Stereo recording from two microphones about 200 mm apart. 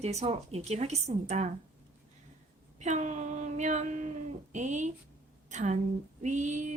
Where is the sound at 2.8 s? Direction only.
35° right (ahead or behind).